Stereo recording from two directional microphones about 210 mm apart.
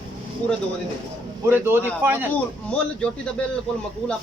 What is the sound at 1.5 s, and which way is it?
Speech, 10° right (ahead or behind).